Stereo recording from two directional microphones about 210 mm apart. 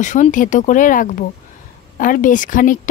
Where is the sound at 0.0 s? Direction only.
35° left (ahead or behind).